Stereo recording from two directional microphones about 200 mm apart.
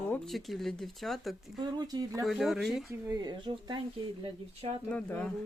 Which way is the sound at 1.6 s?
20° right (ahead or behind).